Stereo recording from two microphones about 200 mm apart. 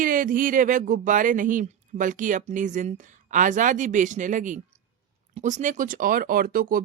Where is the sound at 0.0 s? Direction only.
40° right (ahead or behind).